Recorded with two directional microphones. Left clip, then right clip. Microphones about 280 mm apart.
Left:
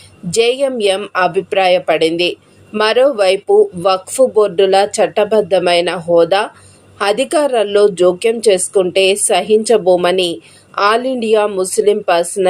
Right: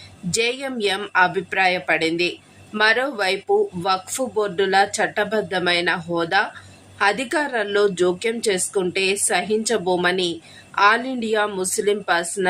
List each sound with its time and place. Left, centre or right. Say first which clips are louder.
0.3 s a woman's voice: left 10 dB; centre